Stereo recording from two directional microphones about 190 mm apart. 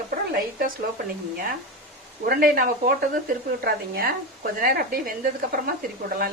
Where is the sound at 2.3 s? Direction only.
45° right (ahead or behind).